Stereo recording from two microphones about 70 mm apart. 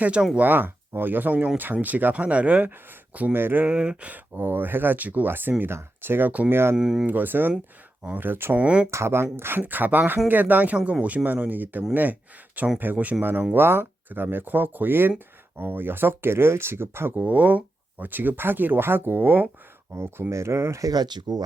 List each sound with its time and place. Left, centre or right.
0.0 s speech: centre
0.3 s speech: right
3.7 s speech: centre
4.4 s speech: right
6.7 s speech: centre
7.1 s speech: right
8.6 s speech: centre
8.9 s speech: right
17.2 s speech: right
20.9 s speech: right